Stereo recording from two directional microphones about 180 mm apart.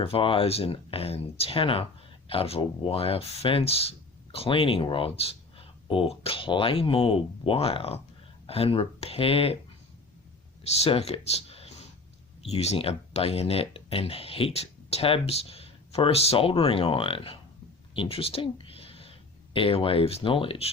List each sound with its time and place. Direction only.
0.0 s speech: 30° left (ahead or behind)
10.8 s speech: 35° left (ahead or behind)
17.9 s a sound: 30° left (ahead or behind)
19.5 s speech: 30° left (ahead or behind)